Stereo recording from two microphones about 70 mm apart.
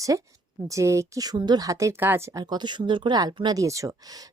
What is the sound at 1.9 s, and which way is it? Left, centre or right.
Speech, right.